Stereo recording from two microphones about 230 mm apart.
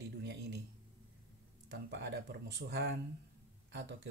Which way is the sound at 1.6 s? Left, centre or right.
Right.